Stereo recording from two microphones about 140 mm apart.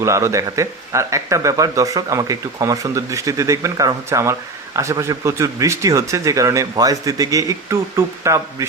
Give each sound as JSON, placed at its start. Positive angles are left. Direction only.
{"t": 0.0, "sound": "speech", "side_deg": -20}